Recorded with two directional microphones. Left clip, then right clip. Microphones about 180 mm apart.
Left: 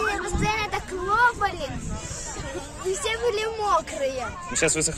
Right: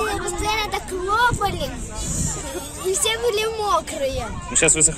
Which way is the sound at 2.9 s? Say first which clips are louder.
Right 4 dB; 5° left (ahead or behind).